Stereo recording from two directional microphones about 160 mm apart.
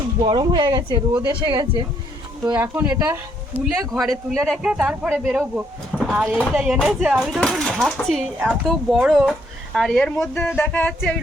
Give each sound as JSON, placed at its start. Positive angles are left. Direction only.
{"t": 0.2, "sound": "speech", "side_deg": -30}
{"t": 2.6, "sound": "speech", "side_deg": -10}
{"t": 3.9, "sound": "speech", "side_deg": 0}
{"t": 5.9, "sound": "a sound", "side_deg": 0}
{"t": 6.1, "sound": "speech", "side_deg": -10}